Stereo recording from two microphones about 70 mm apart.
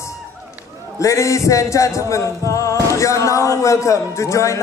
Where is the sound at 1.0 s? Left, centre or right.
Left.